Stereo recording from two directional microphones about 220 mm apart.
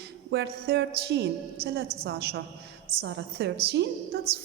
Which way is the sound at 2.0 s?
50° right (ahead or behind).